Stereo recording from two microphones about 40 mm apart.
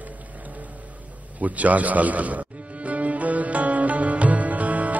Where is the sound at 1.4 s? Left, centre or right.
Right.